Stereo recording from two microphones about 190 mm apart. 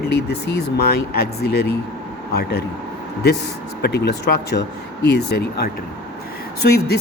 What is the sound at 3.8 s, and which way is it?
Speech, 60° left (ahead or behind).